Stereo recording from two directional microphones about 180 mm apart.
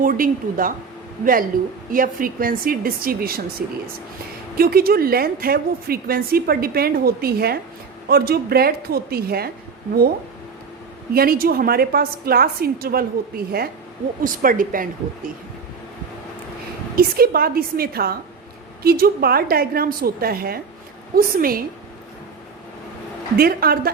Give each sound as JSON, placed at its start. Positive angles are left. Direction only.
{"t": 0.0, "sound": "speech", "side_deg": -50}
{"t": 4.5, "sound": "a woman's voice", "side_deg": -55}
{"t": 11.1, "sound": "a woman's voice", "side_deg": -55}
{"t": 16.9, "sound": "a woman's voice", "side_deg": -55}
{"t": 23.4, "sound": "a woman's voice", "side_deg": -55}